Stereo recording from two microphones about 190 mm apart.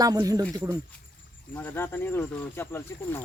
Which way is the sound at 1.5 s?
10° left (ahead or behind).